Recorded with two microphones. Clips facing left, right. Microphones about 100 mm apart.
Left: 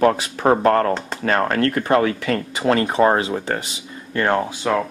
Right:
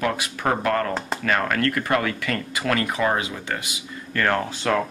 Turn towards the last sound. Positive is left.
turn(degrees=15)  # may be behind; listen again after turning